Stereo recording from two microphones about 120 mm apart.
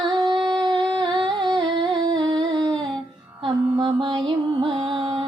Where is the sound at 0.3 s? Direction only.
40° right (ahead or behind).